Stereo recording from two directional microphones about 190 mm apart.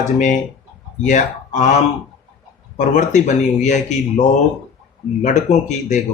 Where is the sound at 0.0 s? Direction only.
40° left (ahead or behind).